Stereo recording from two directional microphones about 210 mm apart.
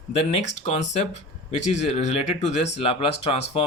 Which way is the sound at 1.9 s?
35° left (ahead or behind).